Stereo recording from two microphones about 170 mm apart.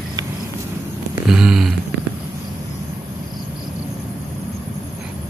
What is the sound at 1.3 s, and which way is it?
Speech, 5° right (ahead or behind).